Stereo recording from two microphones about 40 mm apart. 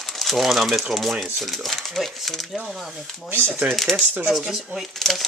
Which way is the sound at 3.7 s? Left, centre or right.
Centre.